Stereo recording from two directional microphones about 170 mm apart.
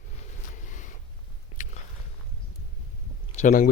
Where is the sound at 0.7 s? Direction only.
50° left (ahead or behind).